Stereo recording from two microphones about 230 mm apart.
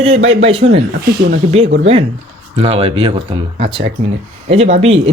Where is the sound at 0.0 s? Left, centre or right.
Right.